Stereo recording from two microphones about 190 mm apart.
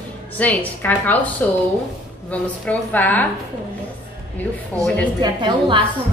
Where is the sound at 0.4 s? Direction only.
10° left (ahead or behind).